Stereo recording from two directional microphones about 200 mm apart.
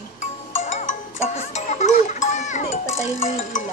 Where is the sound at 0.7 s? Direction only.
35° left (ahead or behind).